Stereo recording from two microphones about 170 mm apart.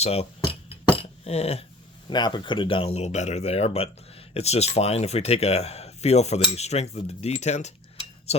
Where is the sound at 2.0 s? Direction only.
25° left (ahead or behind).